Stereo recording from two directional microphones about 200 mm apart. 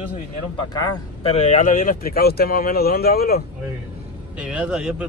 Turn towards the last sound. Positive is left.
turn(degrees=-5)  # may be behind; listen again after turning